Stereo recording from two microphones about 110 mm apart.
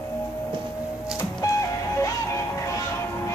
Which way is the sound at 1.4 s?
30° left (ahead or behind).